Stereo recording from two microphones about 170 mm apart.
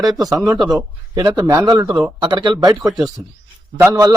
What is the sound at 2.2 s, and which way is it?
A man's voice, 25° right (ahead or behind).